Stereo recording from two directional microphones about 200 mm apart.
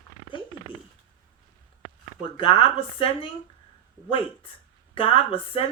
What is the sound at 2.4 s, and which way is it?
Speech, 25° left (ahead or behind).